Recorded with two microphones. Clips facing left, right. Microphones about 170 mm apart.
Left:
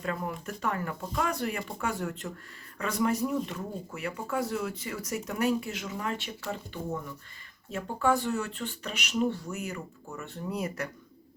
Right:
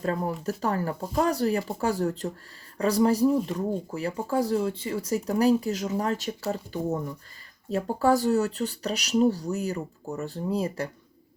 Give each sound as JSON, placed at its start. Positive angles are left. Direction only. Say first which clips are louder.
{"t": 0.0, "sound": "speech", "louder": "right 6 dB", "side_deg": -35}